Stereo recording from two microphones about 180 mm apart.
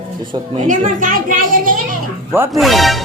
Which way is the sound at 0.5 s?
45° right (ahead or behind).